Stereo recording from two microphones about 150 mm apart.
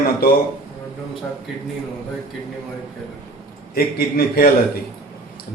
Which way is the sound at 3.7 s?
85° left.